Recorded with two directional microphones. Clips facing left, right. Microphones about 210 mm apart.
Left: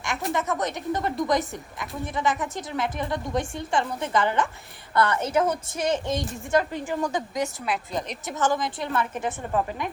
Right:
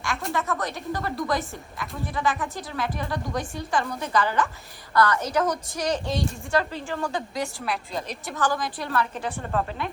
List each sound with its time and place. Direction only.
0.3 s a woman's voice: 20° left (ahead or behind)